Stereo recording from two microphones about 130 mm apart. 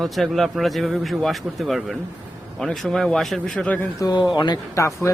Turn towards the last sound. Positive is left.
turn(degrees=20)  # may be behind; listen again after turning